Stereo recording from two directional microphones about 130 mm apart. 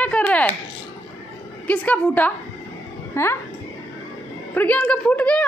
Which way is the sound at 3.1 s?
20° left (ahead or behind).